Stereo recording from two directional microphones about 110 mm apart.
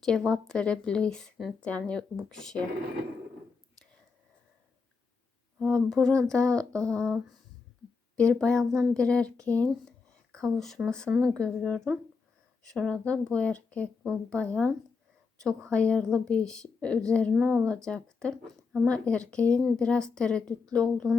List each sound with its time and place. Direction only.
0.0 s speech: 5° left (ahead or behind)
5.5 s speech: 5° left (ahead or behind)
6.8 s a sound: 30° right (ahead or behind)
8.1 s speech: 10° left (ahead or behind)
15.7 s speech: 10° left (ahead or behind)